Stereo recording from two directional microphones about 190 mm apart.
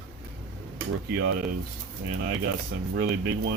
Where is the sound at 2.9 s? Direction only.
60° right (ahead or behind).